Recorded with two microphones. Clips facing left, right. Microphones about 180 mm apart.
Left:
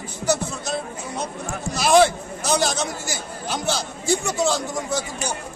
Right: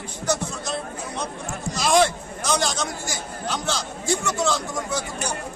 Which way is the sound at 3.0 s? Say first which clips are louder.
Even; 5° left (ahead or behind).